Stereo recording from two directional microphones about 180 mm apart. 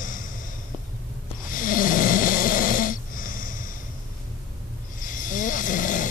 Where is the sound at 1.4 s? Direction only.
50° left (ahead or behind).